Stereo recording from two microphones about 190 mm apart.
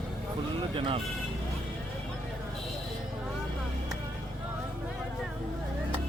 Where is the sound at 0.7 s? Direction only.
25° right (ahead or behind).